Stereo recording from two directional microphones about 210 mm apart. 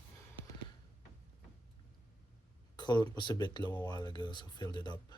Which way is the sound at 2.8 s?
20° left (ahead or behind).